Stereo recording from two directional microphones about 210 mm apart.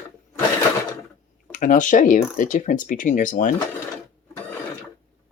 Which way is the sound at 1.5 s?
40° left (ahead or behind).